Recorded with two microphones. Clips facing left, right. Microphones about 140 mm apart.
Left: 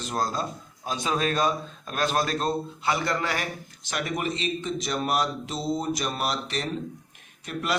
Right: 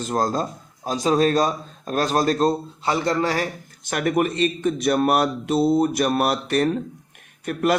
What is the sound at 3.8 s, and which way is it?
A man's voice, 50° right (ahead or behind).